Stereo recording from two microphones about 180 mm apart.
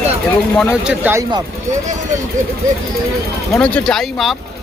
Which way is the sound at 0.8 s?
5° right (ahead or behind).